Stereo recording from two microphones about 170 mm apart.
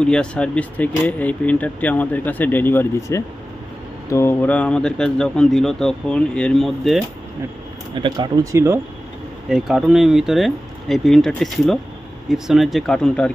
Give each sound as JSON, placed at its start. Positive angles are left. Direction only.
{"t": 0.0, "sound": "speech", "side_deg": 5}
{"t": 7.9, "sound": "speech", "side_deg": -25}
{"t": 9.5, "sound": "speech", "side_deg": 0}